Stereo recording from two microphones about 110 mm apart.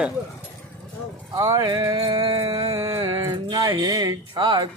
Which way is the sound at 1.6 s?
45° right (ahead or behind).